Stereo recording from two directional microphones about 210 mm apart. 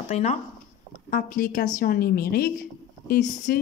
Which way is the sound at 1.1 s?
40° left (ahead or behind).